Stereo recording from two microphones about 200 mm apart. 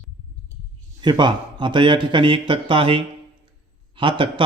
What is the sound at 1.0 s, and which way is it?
A man's voice, 25° right (ahead or behind).